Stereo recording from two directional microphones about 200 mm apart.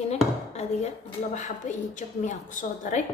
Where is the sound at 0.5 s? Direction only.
35° left (ahead or behind).